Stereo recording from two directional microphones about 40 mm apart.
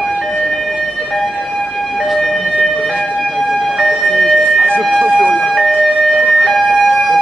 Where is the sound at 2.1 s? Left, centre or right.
Centre.